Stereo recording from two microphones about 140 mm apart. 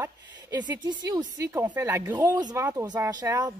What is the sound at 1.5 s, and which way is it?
Speech, 15° right (ahead or behind).